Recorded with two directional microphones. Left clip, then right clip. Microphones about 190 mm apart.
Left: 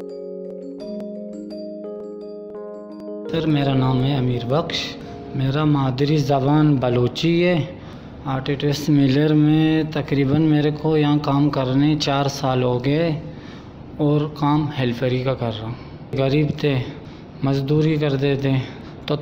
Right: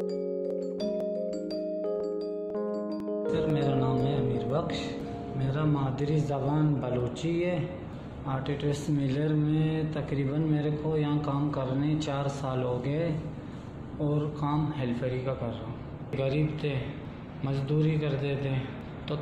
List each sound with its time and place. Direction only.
3.3 s speech: 55° left (ahead or behind)
8.3 s speech: 40° left (ahead or behind)
14.1 s a man's voice: 50° left (ahead or behind)